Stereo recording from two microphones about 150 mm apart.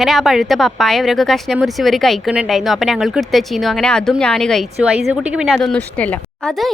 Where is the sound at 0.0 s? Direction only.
Centre (ahead or behind).